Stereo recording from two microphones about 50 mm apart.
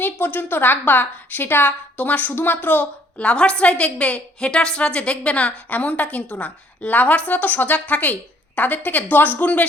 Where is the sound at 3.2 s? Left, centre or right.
Left.